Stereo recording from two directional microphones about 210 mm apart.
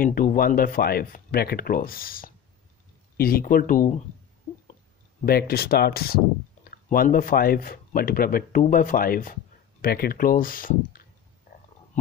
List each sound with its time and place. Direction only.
0.0 s speech: 40° left (ahead or behind)
5.2 s speech: 45° left (ahead or behind)